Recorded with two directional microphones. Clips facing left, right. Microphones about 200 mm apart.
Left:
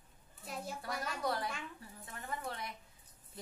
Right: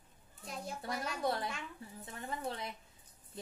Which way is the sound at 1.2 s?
25° right (ahead or behind).